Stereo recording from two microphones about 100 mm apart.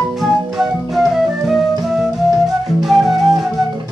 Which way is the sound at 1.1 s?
5° right (ahead or behind).